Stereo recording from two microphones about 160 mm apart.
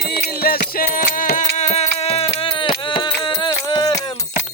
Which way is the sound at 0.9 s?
60° left (ahead or behind).